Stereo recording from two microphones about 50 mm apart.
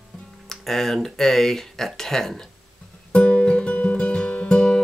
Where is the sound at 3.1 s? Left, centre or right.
Left.